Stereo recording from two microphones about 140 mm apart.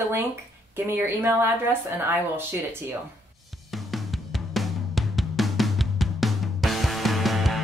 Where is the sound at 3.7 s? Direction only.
Centre (ahead or behind).